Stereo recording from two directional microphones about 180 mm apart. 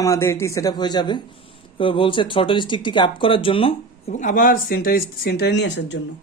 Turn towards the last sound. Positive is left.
turn(degrees=75)  # may be behind; listen again after turning